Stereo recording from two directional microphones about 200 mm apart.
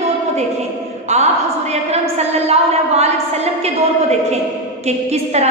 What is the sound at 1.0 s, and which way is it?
A woman's voice, 35° right (ahead or behind).